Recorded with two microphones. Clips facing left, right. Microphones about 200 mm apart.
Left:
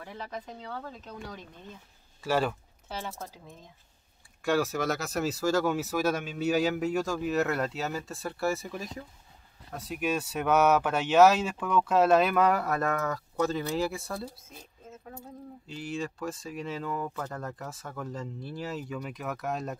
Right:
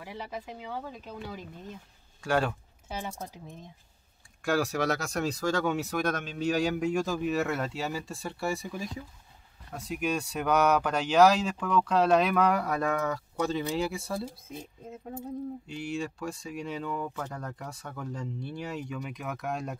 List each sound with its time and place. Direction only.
0.0 s speech: 10° right (ahead or behind)
2.9 s speech: 15° right (ahead or behind)
4.4 s speech: centre (ahead or behind)
14.5 s speech: 20° right (ahead or behind)
15.7 s speech: centre (ahead or behind)